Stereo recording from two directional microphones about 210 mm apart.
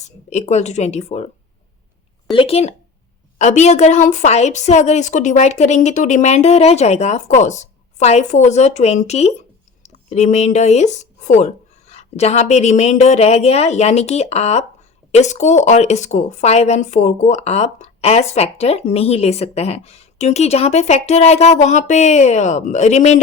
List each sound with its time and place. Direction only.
0.3 s speech: 30° left (ahead or behind)
2.3 s speech: 25° left (ahead or behind)